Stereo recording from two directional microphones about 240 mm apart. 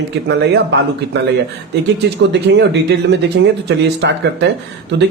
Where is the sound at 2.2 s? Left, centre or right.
Right.